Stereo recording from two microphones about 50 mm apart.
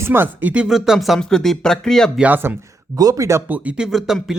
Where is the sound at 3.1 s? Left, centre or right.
Right.